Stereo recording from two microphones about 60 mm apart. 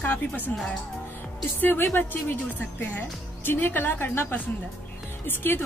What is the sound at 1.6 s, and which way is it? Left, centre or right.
Speech, left.